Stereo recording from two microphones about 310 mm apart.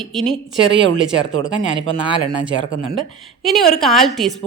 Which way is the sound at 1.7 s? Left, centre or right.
Centre.